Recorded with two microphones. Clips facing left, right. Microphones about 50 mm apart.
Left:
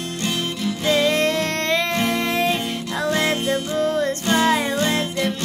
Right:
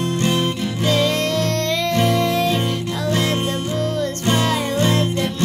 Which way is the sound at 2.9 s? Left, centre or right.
Left.